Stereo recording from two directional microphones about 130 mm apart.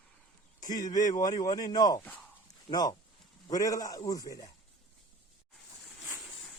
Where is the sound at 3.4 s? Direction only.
30° left (ahead or behind).